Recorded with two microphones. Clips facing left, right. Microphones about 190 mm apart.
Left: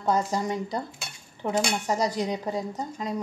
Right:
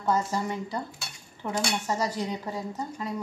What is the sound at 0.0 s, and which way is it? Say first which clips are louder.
Dishes: left 2 dB; 15° left (ahead or behind).